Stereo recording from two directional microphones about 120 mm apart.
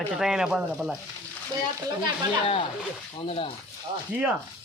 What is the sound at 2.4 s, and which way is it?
Speech, 45° left (ahead or behind).